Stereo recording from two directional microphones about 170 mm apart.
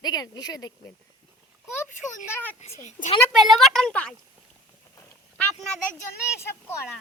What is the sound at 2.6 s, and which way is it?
Speech, 45° left (ahead or behind).